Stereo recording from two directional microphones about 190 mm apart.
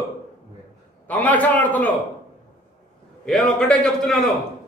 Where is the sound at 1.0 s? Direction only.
10° left (ahead or behind).